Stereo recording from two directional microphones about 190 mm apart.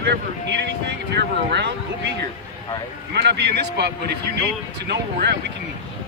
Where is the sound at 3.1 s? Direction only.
60° right (ahead or behind).